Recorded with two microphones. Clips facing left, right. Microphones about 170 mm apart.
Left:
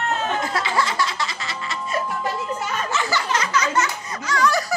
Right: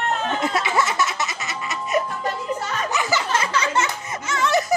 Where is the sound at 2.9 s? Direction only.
20° right (ahead or behind).